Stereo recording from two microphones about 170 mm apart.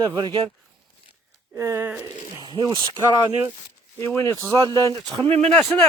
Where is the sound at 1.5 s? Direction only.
15° right (ahead or behind).